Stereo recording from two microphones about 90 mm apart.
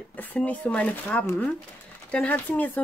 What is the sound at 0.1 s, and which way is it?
Speech, 20° left (ahead or behind).